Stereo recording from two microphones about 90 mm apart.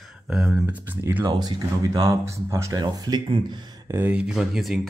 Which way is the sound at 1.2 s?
45° right (ahead or behind).